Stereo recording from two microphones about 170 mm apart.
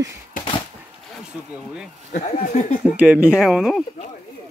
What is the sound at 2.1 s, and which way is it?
Speech, 45° left (ahead or behind).